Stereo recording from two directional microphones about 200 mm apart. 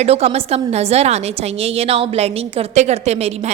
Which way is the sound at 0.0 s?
30° right (ahead or behind).